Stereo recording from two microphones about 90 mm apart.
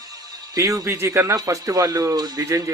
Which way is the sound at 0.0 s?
45° right (ahead or behind).